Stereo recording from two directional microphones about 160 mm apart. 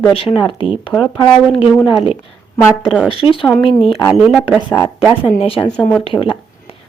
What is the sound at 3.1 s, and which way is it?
Speech, 35° left (ahead or behind).